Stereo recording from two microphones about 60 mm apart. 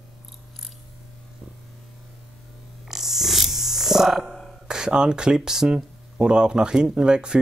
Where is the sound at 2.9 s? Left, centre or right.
Centre.